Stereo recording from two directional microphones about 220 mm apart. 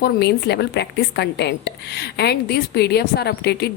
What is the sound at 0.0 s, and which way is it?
A woman's voice, 50° left (ahead or behind).